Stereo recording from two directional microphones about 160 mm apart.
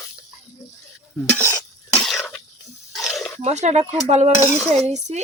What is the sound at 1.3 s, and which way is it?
Stir, 15° left (ahead or behind).